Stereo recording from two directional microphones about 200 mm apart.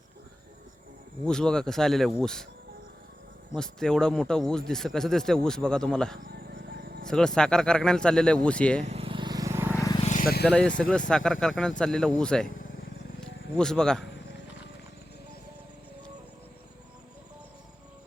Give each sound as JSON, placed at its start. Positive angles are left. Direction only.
{"t": 1.2, "sound": "speech", "side_deg": 5}
{"t": 3.5, "sound": "speech", "side_deg": 5}
{"t": 6.2, "sound": "a sound", "side_deg": -50}
{"t": 7.1, "sound": "speech", "side_deg": 5}
{"t": 8.8, "sound": "vehicle", "side_deg": -30}
{"t": 9.7, "sound": "vehicle", "side_deg": 15}
{"t": 10.0, "sound": "vehicle", "side_deg": 40}
{"t": 10.4, "sound": "speech", "side_deg": 5}
{"t": 13.6, "sound": "speech", "side_deg": 5}